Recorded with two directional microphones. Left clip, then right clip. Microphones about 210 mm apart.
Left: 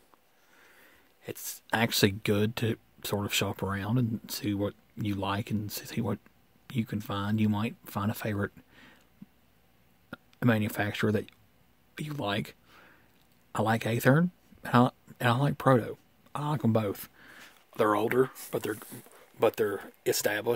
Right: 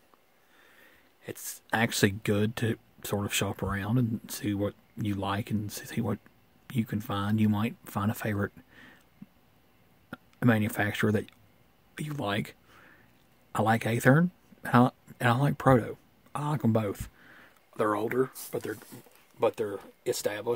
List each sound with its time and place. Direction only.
0.6 s speech: 10° left (ahead or behind)
10.0 s speech: 5° left (ahead or behind)
11.9 s a sound: 5° left (ahead or behind)
13.5 s speech: 5° left (ahead or behind); by 20.5 s 40° left (ahead or behind)